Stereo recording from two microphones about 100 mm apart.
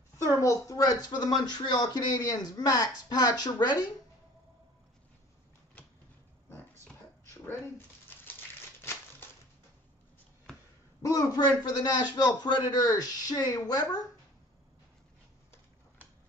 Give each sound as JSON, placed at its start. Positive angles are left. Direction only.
{"t": 0.4, "sound": "speech", "side_deg": 35}
{"t": 7.4, "sound": "speech", "side_deg": 20}
{"t": 11.0, "sound": "speech", "side_deg": 35}